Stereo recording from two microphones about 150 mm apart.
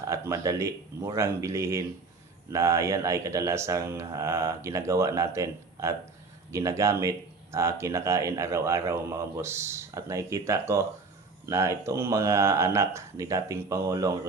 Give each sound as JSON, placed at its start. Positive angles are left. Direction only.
{"t": 0.1, "sound": "speech", "side_deg": -20}